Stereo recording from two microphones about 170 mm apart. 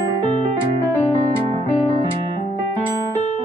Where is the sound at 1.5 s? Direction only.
35° right (ahead or behind).